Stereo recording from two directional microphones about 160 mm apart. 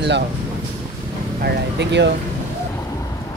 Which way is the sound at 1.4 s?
90° right.